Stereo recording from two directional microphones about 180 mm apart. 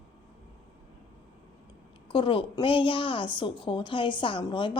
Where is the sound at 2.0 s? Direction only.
30° left (ahead or behind).